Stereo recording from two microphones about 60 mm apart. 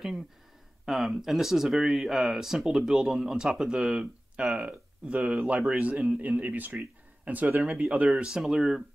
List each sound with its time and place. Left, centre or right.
0.8 s speech: centre